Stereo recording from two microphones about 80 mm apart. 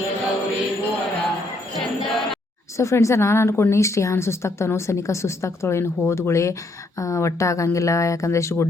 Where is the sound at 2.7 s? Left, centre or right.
Left.